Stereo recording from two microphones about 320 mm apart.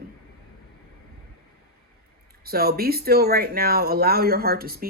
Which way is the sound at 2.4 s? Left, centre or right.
Right.